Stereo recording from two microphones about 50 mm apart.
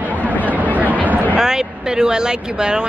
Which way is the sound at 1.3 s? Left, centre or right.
Centre.